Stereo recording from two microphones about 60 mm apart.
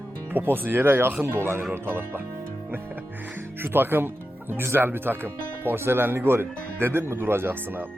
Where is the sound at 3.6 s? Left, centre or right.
Right.